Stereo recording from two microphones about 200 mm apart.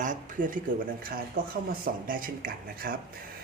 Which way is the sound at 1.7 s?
45° right (ahead or behind).